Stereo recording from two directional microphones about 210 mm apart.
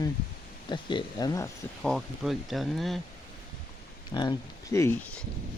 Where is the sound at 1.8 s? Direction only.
Centre (ahead or behind).